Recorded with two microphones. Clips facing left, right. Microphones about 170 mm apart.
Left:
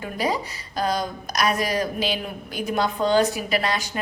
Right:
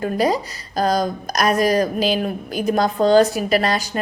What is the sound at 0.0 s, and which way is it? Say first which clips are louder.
Speech: right 6 dB; 40° right (ahead or behind).